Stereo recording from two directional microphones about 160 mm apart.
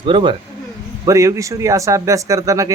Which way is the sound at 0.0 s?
30° right (ahead or behind).